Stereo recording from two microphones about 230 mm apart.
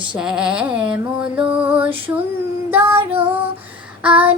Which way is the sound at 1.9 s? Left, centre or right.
Right.